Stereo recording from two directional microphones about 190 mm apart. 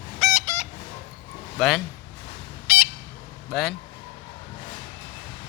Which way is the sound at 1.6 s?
Centre (ahead or behind).